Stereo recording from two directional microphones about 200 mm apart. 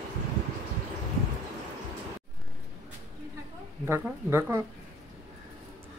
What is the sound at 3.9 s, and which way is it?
Speech, 10° right (ahead or behind).